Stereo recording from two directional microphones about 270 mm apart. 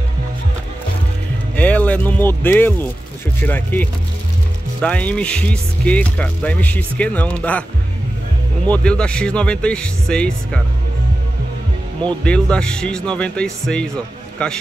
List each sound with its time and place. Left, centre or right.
1.6 s speech: centre
8.6 s speech: centre
12.1 s speech: centre